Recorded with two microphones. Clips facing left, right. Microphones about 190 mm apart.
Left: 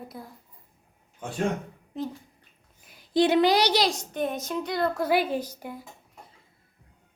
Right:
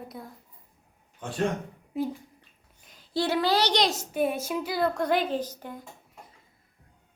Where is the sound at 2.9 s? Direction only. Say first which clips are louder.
Left 6 dB; 15° left (ahead or behind).